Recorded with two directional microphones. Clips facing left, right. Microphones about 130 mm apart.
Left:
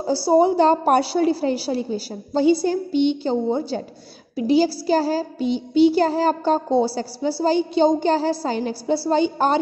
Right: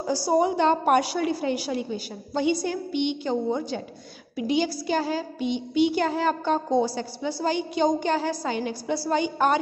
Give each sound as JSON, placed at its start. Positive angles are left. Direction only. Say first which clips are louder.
{"t": 0.0, "sound": "child singing", "louder": "left 6 dB", "side_deg": 30}